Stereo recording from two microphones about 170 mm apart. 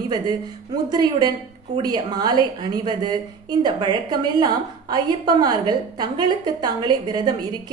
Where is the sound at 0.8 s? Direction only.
25° right (ahead or behind).